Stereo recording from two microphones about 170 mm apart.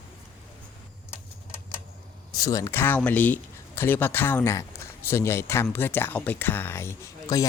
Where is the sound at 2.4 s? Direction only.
20° left (ahead or behind).